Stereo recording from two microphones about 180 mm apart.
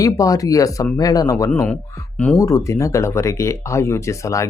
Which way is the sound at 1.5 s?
5° left (ahead or behind).